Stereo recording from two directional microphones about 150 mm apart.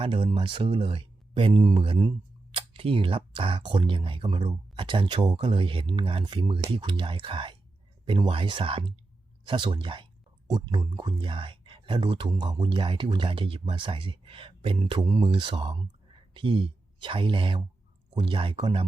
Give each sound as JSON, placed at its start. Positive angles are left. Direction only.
{"t": 0.0, "sound": "speech", "side_deg": -35}